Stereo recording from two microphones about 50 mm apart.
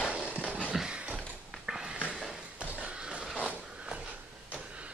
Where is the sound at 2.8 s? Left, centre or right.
Centre.